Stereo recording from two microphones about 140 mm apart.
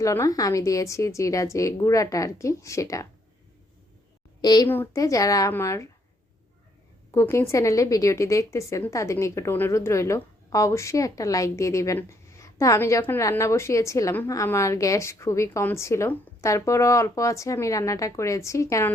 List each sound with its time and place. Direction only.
0.0 s a woman's voice: 20° left (ahead or behind)
4.4 s a woman's voice: 30° left (ahead or behind)
7.1 s a woman's voice: 20° left (ahead or behind)